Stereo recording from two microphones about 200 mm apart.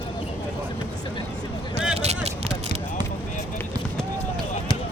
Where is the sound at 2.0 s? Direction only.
30° right (ahead or behind).